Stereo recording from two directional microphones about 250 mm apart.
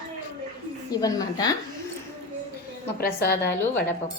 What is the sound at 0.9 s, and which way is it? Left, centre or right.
Speech, centre.